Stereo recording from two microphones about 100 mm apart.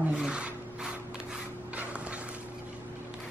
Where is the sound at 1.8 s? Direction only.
15° right (ahead or behind).